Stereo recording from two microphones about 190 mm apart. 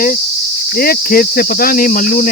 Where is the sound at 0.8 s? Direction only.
50° left (ahead or behind).